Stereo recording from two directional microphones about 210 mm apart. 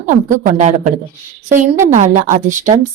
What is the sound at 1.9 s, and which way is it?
Speech, 35° right (ahead or behind).